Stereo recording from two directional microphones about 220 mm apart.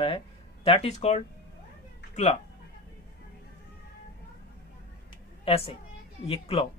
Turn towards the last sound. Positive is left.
turn(degrees=25)  # may be behind; listen again after turning